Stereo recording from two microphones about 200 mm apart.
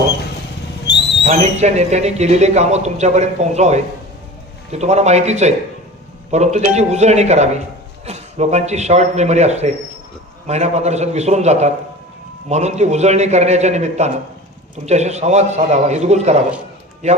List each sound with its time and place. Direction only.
0.9 s owl: 55° left (ahead or behind)
1.3 s speech: 35° right (ahead or behind)